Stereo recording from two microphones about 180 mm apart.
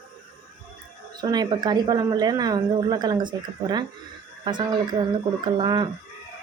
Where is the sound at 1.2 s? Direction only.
20° right (ahead or behind).